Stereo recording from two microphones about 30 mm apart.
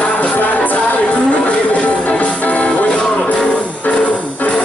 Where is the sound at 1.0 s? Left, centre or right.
Left.